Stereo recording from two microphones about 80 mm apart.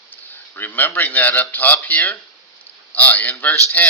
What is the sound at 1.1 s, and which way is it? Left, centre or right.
A man's voice, left.